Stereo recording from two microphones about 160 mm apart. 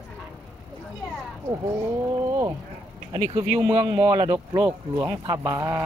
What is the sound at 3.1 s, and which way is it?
A man's voice, 35° right (ahead or behind).